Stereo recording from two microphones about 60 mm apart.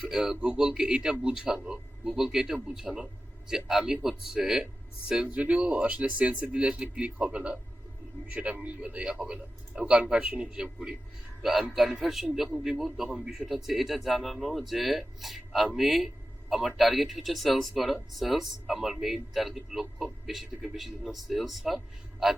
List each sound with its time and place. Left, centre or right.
0.0 s a man's voice: centre